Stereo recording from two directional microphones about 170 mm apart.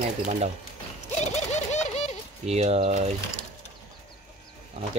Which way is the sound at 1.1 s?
45° left (ahead or behind).